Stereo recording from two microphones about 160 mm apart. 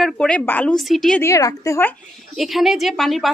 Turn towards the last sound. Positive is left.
turn(degrees=0)  # may be behind; listen again after turning